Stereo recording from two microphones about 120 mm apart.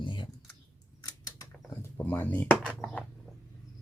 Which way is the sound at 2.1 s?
15° left (ahead or behind).